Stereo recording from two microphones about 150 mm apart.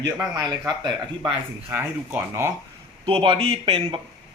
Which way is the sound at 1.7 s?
15° right (ahead or behind).